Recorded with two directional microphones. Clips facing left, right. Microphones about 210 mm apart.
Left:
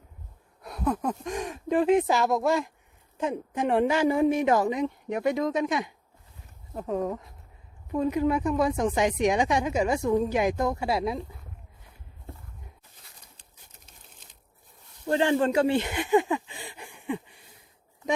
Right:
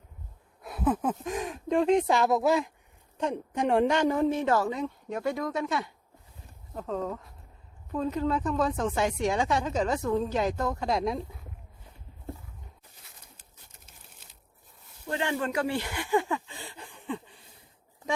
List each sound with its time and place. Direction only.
0.6 s speech: 5° right (ahead or behind)
15.1 s speech: 35° left (ahead or behind); by 17.3 s 10° left (ahead or behind)